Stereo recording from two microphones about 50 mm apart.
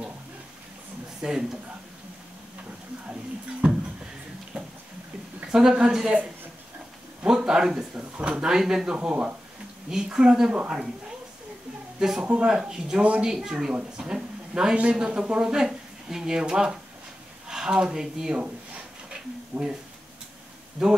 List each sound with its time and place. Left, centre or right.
1.2 s speech: centre
4.5 s a sound: centre
5.5 s speech: centre
7.2 s speech: centre
9.8 s speech: centre
13.0 s speech: right
13.3 s speech: centre
20.8 s speech: centre